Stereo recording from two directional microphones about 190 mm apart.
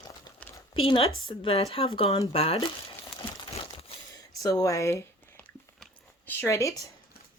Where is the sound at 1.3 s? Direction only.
30° left (ahead or behind).